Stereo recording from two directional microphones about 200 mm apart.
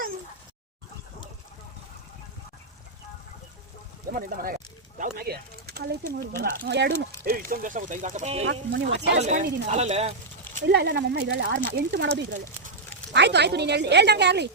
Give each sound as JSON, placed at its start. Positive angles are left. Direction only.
{"t": 4.1, "sound": "a woman's voice", "side_deg": -45}
{"t": 7.3, "sound": "speech", "side_deg": -45}
{"t": 8.7, "sound": "a woman's voice", "side_deg": -65}
{"t": 9.2, "sound": "speech", "side_deg": -35}
{"t": 10.7, "sound": "a woman's voice", "side_deg": -55}
{"t": 11.4, "sound": "speech", "side_deg": -45}
{"t": 11.7, "sound": "a woman's voice", "side_deg": -60}